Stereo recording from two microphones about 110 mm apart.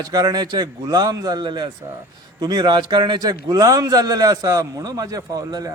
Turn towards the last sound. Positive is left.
turn(degrees=-35)  # may be behind; listen again after turning